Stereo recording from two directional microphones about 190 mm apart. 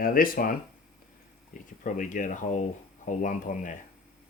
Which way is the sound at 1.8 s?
45° left (ahead or behind).